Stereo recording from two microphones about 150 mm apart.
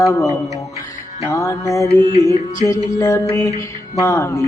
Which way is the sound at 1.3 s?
20° left (ahead or behind).